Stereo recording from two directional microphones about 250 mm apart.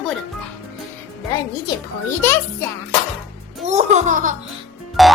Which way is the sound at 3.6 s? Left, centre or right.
Right.